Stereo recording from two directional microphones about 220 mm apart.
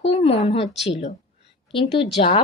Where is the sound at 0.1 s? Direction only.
25° left (ahead or behind).